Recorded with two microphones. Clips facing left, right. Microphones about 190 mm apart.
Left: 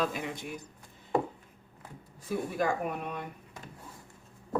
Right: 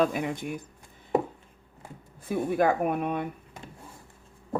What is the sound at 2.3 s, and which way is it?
Speech, 55° right (ahead or behind).